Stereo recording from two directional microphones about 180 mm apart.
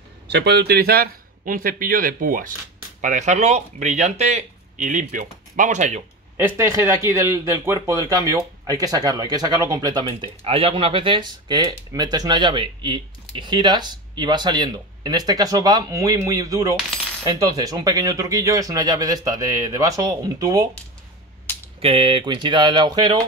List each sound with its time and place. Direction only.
0.3 s speech: 65° right (ahead or behind); by 6.0 s 40° right (ahead or behind)
6.3 s speech: 15° right (ahead or behind)
21.7 s speech: 30° right (ahead or behind)